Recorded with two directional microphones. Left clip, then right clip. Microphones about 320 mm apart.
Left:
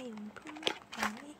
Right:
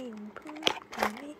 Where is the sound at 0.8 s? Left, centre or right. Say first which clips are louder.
Right 5 dB; centre.